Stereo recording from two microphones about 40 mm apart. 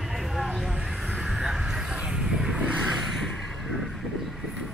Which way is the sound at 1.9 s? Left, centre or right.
Right.